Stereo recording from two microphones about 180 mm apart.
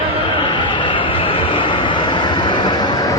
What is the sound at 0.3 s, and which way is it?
Vehicle, 25° left (ahead or behind).